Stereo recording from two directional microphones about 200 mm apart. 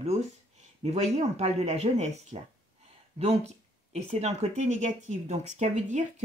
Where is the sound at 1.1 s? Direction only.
35° right (ahead or behind).